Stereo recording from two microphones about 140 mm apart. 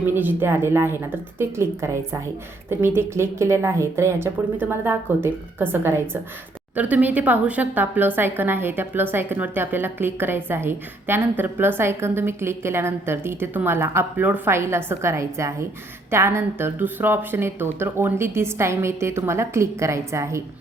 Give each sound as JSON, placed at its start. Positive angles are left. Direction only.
{"t": 0.0, "sound": "speech", "side_deg": -15}